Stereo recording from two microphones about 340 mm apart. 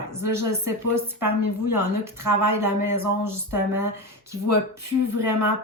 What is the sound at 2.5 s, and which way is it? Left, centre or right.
Speech, centre.